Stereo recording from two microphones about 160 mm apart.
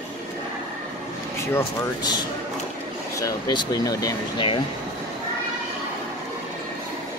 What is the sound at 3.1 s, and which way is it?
Speech, 25° left (ahead or behind).